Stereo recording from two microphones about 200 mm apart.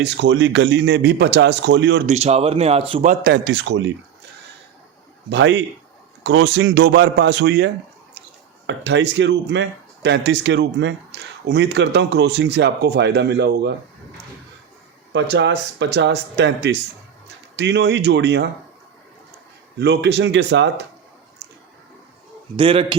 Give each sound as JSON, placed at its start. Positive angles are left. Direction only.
{"t": 0.0, "sound": "speech", "side_deg": -60}
{"t": 2.0, "sound": "speech", "side_deg": -30}
{"t": 3.1, "sound": "speech", "side_deg": -50}
{"t": 5.3, "sound": "speech", "side_deg": -65}
{"t": 15.1, "sound": "speech", "side_deg": -65}
{"t": 19.8, "sound": "speech", "side_deg": -55}
{"t": 22.5, "sound": "a man's voice", "side_deg": -25}